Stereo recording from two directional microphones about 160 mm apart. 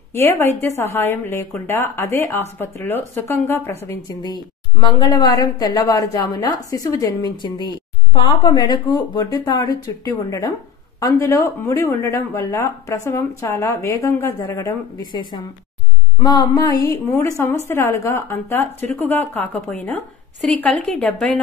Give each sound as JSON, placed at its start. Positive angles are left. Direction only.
{"t": 0.1, "sound": "a woman's voice", "side_deg": 15}
{"t": 16.2, "sound": "a woman's voice", "side_deg": 25}